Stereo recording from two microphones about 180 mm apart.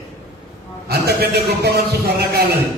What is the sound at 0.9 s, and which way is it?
A man's voice, 60° right (ahead or behind).